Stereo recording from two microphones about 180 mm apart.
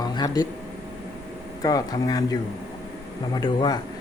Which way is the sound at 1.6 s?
20° left (ahead or behind).